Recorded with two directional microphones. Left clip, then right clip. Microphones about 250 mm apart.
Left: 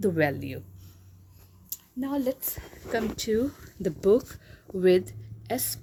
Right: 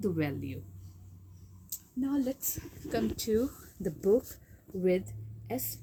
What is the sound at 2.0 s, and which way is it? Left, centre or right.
Speech, left.